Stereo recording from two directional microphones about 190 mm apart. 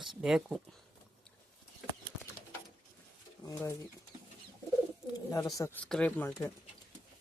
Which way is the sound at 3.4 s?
15° left (ahead or behind).